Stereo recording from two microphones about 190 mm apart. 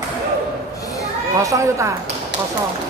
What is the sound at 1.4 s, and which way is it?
Speech, 15° right (ahead or behind).